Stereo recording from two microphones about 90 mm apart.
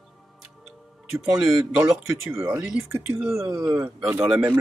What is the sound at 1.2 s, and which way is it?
Speech, 5° right (ahead or behind).